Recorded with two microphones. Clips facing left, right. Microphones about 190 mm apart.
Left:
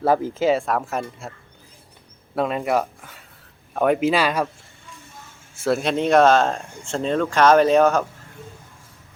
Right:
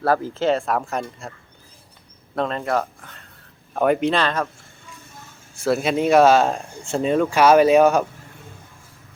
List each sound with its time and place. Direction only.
0.0 s speech: 15° left (ahead or behind)
0.4 s speech: centre (ahead or behind)
2.3 s speech: 10° left (ahead or behind)
5.5 s speech: centre (ahead or behind)